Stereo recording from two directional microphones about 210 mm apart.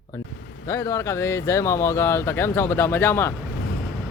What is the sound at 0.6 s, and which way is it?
Speech, 15° left (ahead or behind).